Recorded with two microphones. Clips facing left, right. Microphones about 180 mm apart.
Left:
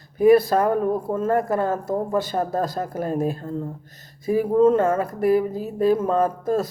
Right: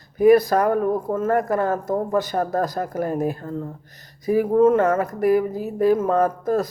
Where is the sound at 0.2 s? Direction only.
30° left (ahead or behind).